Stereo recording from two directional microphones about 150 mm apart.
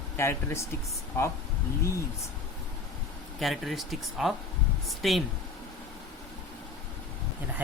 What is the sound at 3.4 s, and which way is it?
Speech, centre (ahead or behind).